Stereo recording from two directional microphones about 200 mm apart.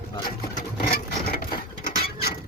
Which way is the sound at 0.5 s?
45° left (ahead or behind).